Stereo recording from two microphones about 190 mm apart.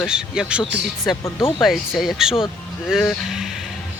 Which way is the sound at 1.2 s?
15° left (ahead or behind).